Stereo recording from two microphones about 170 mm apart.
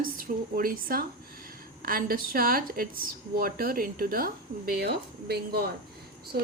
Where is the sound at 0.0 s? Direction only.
55° right (ahead or behind).